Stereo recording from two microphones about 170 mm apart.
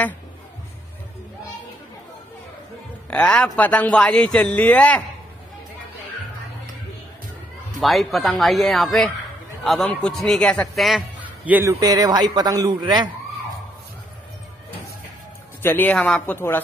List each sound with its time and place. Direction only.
3.1 s speech: 5° left (ahead or behind)
7.8 s a man's voice: centre (ahead or behind)
11.8 s a man's voice: 25° right (ahead or behind)
15.6 s speech: 10° left (ahead or behind)